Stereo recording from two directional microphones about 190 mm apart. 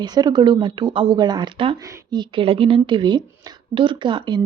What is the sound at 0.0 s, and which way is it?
Speech, 20° right (ahead or behind).